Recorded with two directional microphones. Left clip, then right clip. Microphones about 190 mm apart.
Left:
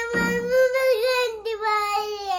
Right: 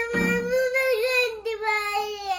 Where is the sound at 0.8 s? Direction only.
15° left (ahead or behind).